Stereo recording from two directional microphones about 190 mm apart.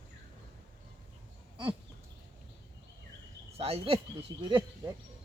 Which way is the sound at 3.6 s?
30° right (ahead or behind).